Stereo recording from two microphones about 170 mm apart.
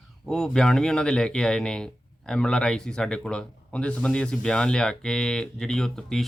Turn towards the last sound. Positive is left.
turn(degrees=5)  # may be behind; listen again after turning